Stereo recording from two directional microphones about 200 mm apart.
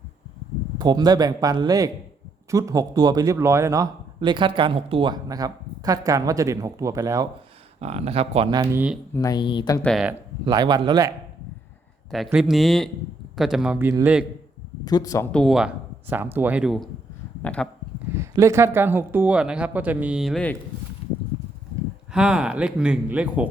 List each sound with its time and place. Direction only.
0.8 s a man's voice: 20° right (ahead or behind)
7.8 s speech: 30° right (ahead or behind)
9.1 s speech: 20° left (ahead or behind)
9.8 s speech: centre (ahead or behind)
10.4 s speech: 20° right (ahead or behind)
12.1 s speech: centre (ahead or behind)
14.8 s speech: 20° left (ahead or behind)
15.3 s speech: centre (ahead or behind)
18.1 s a man's voice: 15° right (ahead or behind); by 20.6 s 5° left (ahead or behind)
22.1 s speech: 5° right (ahead or behind)